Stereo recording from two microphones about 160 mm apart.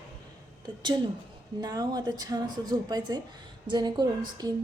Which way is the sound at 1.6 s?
25° right (ahead or behind).